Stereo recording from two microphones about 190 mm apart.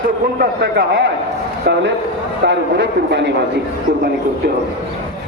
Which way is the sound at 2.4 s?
65° right (ahead or behind).